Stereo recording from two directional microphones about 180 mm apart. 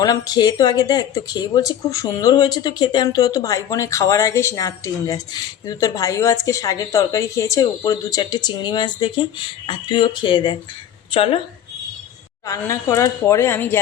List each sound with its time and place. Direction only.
0.0 s speech: 20° left (ahead or behind)
12.5 s a woman's voice: 15° left (ahead or behind)